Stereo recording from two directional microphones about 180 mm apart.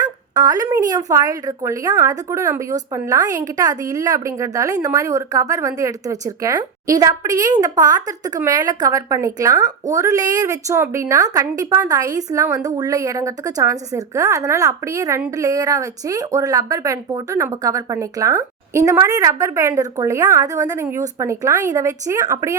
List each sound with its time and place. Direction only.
0.0 s speech: 20° right (ahead or behind)